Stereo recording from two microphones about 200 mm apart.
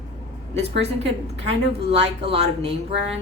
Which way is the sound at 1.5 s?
30° right (ahead or behind).